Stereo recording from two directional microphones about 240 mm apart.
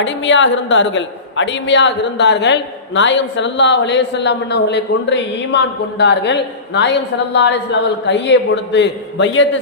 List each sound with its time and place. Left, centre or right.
0.0 s a woman's voice: left